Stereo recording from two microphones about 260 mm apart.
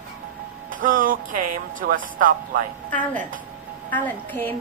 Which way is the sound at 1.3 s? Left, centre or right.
Right.